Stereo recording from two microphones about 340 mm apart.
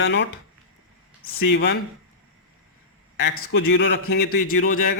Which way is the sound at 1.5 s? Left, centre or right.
Left.